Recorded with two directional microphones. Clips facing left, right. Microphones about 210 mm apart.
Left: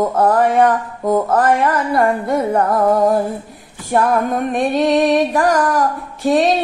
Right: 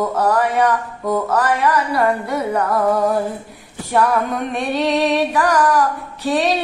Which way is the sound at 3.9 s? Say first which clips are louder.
Left 2 dB; 45° left (ahead or behind).